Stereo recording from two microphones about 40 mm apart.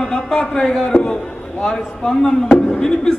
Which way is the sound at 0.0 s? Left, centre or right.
Centre.